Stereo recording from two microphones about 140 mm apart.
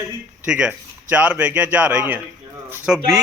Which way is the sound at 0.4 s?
5° right (ahead or behind).